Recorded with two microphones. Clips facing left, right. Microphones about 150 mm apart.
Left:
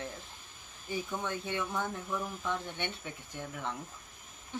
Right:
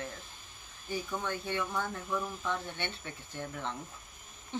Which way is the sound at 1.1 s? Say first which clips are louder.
Right 1 dB; 15° left (ahead or behind).